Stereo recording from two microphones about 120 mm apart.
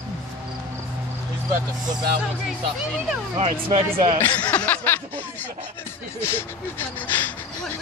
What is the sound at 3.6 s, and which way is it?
Speech, 50° right (ahead or behind).